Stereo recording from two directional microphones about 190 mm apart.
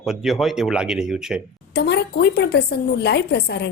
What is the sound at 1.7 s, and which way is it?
A woman's voice, 60° left (ahead or behind).